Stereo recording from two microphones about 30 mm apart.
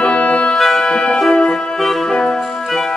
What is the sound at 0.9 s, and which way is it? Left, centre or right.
Music, centre.